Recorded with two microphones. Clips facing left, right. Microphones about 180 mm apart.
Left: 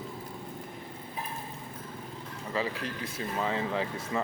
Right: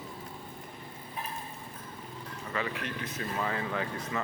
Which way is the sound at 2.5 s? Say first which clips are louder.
Left 2 dB; 30° left (ahead or behind).